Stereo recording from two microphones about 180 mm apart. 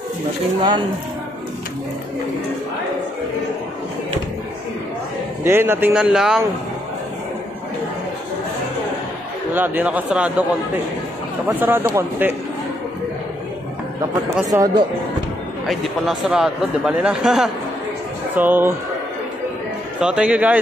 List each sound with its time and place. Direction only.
0.6 s speech: 25° right (ahead or behind)
5.4 s speech: 15° right (ahead or behind)
9.5 s speech: 10° right (ahead or behind)
11.4 s speech: 10° right (ahead or behind)
14.5 s speech: 20° right (ahead or behind)
15.6 s speech: centre (ahead or behind)
20.0 s speech: 5° right (ahead or behind)